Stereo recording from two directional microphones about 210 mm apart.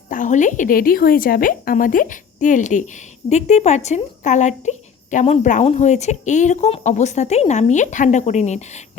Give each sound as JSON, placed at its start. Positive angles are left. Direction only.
{"t": 0.1, "sound": "a woman's voice", "side_deg": 35}